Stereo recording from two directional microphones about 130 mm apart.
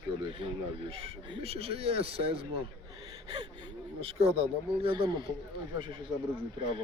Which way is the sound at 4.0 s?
50° right (ahead or behind).